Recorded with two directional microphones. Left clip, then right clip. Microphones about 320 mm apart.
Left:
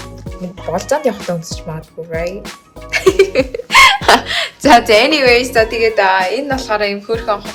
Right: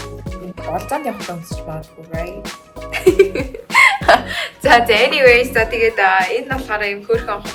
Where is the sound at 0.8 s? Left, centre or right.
Left.